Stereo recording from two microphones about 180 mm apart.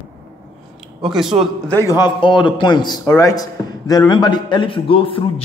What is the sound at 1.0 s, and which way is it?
Speech, 5° right (ahead or behind).